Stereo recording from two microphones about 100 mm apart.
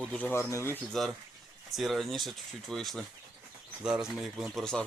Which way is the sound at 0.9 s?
5° left (ahead or behind).